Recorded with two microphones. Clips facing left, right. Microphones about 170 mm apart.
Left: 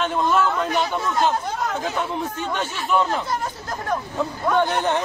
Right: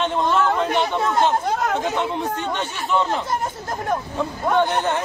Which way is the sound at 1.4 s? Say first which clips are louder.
Right 4 dB; 55° right (ahead or behind).